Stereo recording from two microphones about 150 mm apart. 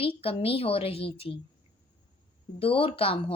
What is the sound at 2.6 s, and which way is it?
Speech, 35° left (ahead or behind).